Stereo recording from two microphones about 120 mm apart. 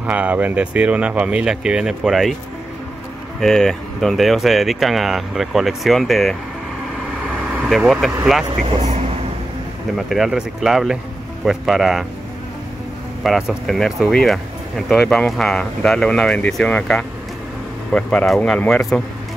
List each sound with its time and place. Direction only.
0.0 s speech: 10° right (ahead or behind)
3.3 s speech: 5° left (ahead or behind)
7.6 s speech: 5° right (ahead or behind)
8.7 s speech: 70° right (ahead or behind)
9.9 s speech: centre (ahead or behind)
13.2 s speech: centre (ahead or behind)